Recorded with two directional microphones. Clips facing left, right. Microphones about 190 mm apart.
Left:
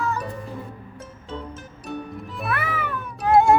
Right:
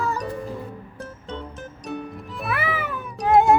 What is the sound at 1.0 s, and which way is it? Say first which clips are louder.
Music: right 1 dB; centre (ahead or behind).